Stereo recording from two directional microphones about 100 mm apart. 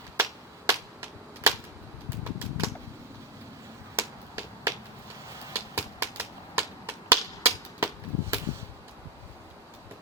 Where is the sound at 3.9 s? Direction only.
25° right (ahead or behind).